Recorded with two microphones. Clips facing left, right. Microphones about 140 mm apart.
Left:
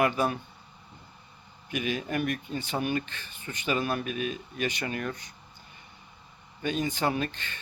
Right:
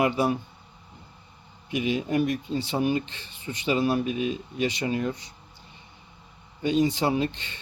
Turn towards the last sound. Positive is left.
turn(degrees=-25)  # may be behind; listen again after turning